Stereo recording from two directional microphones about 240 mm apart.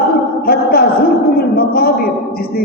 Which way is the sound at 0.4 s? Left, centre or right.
Left.